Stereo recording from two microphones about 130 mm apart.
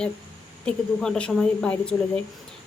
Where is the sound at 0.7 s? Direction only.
5° left (ahead or behind).